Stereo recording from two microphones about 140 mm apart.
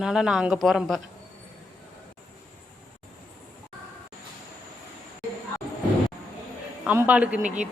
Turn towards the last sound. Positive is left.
turn(degrees=-10)  # may be behind; listen again after turning